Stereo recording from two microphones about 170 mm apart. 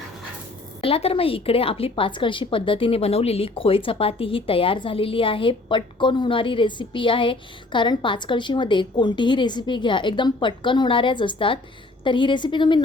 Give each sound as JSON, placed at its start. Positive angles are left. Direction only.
{"t": 0.8, "sound": "a woman's voice", "side_deg": 35}